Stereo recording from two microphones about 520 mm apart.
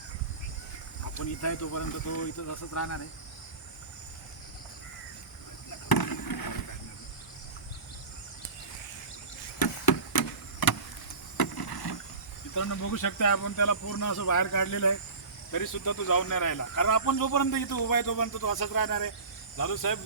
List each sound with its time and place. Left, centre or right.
1.0 s speech: left
5.9 s a sound: left
9.6 s vehicle: left
12.5 s speech: left